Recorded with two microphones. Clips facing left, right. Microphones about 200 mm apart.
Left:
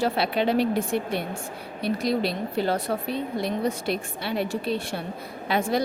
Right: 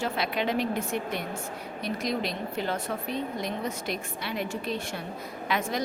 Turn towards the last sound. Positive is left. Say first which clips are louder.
# left 5 dB
turn(degrees=30)  # may be behind; listen again after turning